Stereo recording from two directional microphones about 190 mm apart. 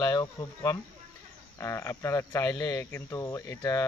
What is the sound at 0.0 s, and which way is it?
Speech, 20° left (ahead or behind).